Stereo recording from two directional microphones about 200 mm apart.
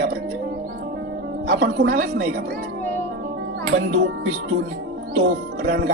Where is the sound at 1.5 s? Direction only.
55° right (ahead or behind).